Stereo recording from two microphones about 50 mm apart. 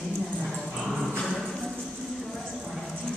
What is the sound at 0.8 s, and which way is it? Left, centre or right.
Dog, centre.